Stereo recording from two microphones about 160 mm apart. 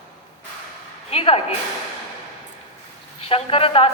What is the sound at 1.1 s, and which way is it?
Speech, 35° left (ahead or behind).